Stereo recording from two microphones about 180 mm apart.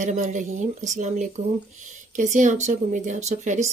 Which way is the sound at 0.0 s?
45° right (ahead or behind).